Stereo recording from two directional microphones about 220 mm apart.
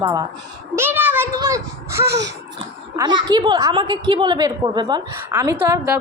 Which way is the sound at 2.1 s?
50° right (ahead or behind).